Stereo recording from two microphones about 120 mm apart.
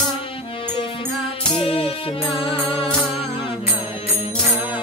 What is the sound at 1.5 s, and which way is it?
Music, 50° left (ahead or behind).